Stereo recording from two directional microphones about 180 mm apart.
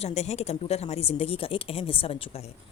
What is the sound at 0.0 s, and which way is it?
A woman's voice, 35° left (ahead or behind).